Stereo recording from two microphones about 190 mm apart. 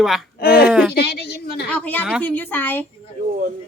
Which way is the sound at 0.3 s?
50° left (ahead or behind).